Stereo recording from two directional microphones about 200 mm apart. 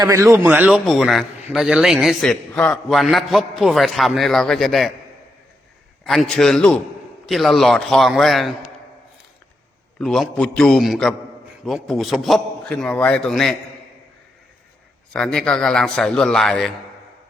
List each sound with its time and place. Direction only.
0.0 s a man's voice: 15° right (ahead or behind); by 4.9 s centre (ahead or behind)
6.1 s a man's voice: centre (ahead or behind)
10.0 s a man's voice: centre (ahead or behind)
15.1 s a man's voice: 5° left (ahead or behind)